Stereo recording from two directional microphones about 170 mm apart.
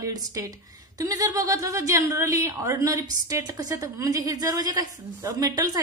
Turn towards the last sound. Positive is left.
turn(degrees=-20)  # may be behind; listen again after turning